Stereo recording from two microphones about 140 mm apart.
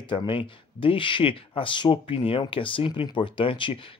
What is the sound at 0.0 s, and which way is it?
Speech, 35° left (ahead or behind).